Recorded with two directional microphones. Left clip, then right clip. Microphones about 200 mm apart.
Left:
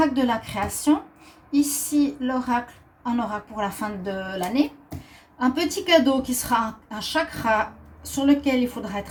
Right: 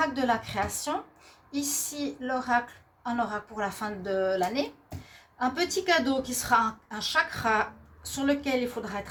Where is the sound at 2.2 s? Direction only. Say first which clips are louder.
Left 2 dB; 45° right (ahead or behind).